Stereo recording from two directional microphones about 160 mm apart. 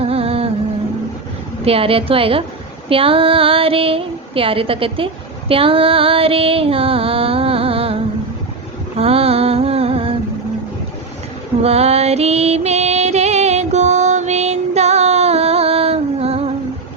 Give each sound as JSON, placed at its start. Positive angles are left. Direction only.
{"t": 0.0, "sound": "music", "side_deg": -35}
{"t": 1.6, "sound": "music", "side_deg": -35}
{"t": 9.0, "sound": "a sound", "side_deg": -40}
{"t": 11.6, "sound": "music", "side_deg": -40}